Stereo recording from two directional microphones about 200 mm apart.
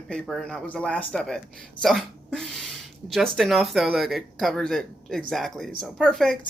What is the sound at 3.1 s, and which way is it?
Speech, centre (ahead or behind).